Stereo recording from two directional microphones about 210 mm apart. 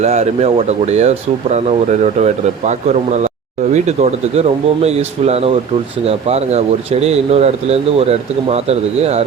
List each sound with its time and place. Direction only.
0.0 s speech: 30° right (ahead or behind)